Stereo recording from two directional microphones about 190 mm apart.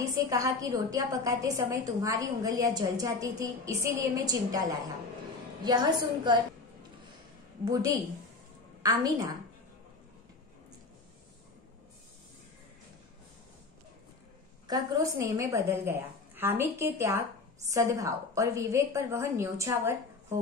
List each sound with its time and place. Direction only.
0.0 s a woman's voice: 20° right (ahead or behind)
7.6 s a woman's voice: 20° right (ahead or behind)
9.0 s a woman's voice: 20° right (ahead or behind)
14.7 s a woman's voice: 15° right (ahead or behind)